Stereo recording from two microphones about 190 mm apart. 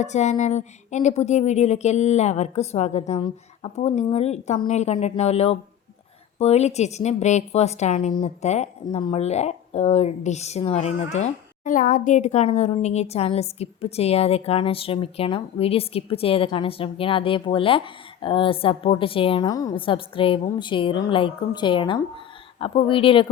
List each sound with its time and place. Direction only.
0.0 s a woman's voice: 35° left (ahead or behind)